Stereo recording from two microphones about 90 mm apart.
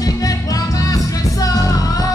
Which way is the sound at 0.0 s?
40° left (ahead or behind).